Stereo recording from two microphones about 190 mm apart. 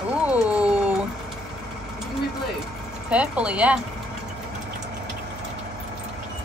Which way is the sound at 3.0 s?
5° right (ahead or behind).